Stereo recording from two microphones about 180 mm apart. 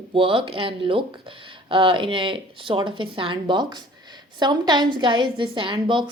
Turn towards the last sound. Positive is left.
turn(degrees=-25)  # may be behind; listen again after turning